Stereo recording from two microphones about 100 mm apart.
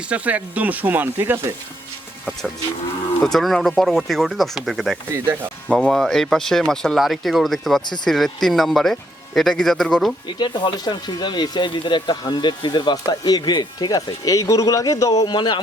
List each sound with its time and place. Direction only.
0.1 s speech: 15° right (ahead or behind)
3.2 s speech: 5° left (ahead or behind)
5.1 s speech: 25° right (ahead or behind)
5.7 s speech: centre (ahead or behind)
10.2 s speech: 50° left (ahead or behind)
15.4 s speech: 50° left (ahead or behind)